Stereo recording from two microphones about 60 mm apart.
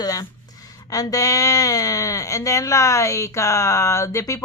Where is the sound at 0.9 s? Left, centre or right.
Left.